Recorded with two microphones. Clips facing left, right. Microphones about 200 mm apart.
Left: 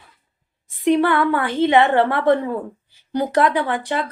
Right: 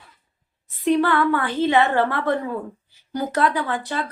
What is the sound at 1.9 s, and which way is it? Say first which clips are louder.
Speech: left 4 dB; 30° left (ahead or behind).